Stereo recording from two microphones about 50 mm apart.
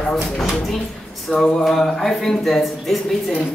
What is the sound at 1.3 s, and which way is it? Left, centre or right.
A man's voice, centre.